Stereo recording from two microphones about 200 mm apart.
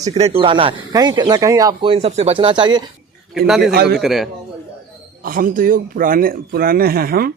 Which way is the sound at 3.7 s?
55° right (ahead or behind).